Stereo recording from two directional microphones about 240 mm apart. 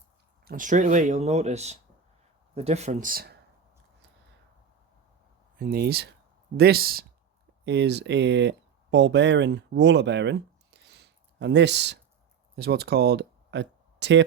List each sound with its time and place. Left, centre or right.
0.4 s speech: right
5.5 s speech: right